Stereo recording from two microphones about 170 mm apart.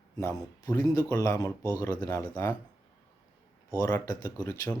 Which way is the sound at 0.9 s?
20° left (ahead or behind).